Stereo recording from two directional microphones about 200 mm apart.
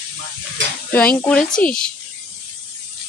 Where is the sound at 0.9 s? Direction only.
5° left (ahead or behind).